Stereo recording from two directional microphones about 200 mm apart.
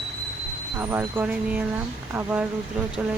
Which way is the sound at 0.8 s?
10° right (ahead or behind).